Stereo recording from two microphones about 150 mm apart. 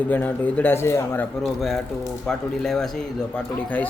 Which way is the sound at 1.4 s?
Centre (ahead or behind).